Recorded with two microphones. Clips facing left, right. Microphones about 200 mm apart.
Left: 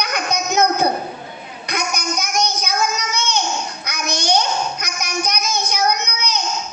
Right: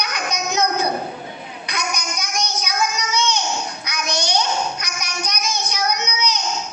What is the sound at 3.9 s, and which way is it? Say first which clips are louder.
Babbling: left 4 dB; 50° left (ahead or behind).